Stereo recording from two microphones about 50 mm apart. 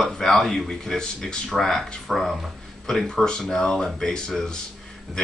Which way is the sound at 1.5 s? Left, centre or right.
Centre.